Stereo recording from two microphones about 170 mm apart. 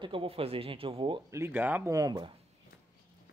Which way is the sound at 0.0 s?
30° right (ahead or behind).